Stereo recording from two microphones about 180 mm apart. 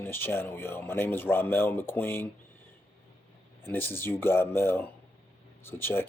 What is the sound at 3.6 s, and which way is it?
Speech, 10° left (ahead or behind).